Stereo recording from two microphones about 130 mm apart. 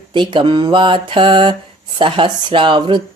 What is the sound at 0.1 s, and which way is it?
Speech, 35° right (ahead or behind).